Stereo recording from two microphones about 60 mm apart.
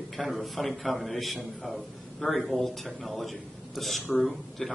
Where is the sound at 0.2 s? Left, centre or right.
Centre.